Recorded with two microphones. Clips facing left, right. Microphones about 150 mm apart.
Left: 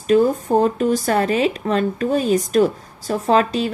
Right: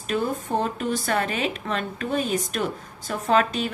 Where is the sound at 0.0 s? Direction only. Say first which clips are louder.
Left 10 dB; 40° left (ahead or behind).